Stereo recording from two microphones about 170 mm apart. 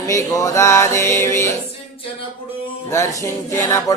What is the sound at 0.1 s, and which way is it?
Music, 20° left (ahead or behind).